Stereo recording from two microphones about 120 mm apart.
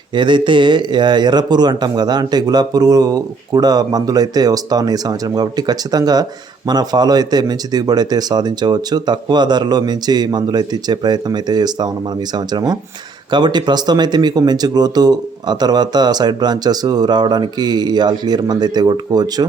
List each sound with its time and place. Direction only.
0.1 s speech: 40° right (ahead or behind)